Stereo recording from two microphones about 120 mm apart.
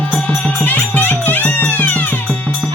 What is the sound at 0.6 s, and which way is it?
Music, 15° left (ahead or behind).